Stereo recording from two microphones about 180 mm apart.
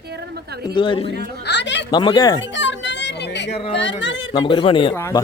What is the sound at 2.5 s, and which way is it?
Speech, 90° left.